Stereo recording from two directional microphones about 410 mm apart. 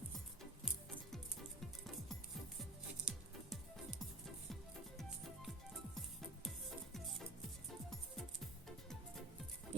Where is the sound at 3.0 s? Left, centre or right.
Centre.